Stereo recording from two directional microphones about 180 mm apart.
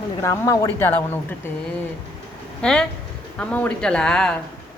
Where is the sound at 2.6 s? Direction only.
5° left (ahead or behind).